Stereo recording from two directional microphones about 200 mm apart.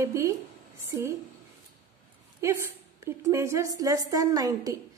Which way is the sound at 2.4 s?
15° right (ahead or behind).